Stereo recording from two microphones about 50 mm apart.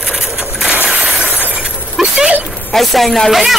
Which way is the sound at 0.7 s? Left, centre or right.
Right.